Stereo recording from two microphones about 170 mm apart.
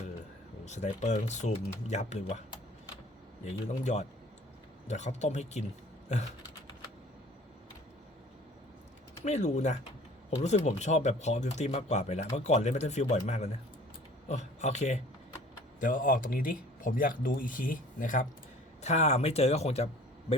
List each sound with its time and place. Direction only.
0.6 s speech: 45° left (ahead or behind)
3.4 s speech: 45° left (ahead or behind)
9.2 s speech: 40° left (ahead or behind)